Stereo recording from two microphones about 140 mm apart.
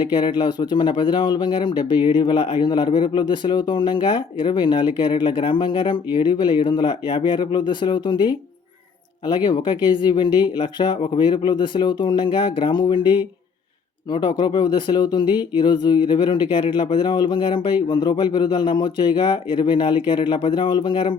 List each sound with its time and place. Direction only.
0.1 s speech: 35° left (ahead or behind)